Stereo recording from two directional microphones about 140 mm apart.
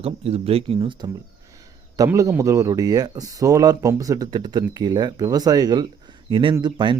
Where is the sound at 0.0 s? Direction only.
45° right (ahead or behind).